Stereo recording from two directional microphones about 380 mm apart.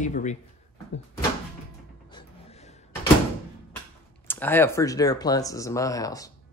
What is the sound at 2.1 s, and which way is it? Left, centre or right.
Music, centre.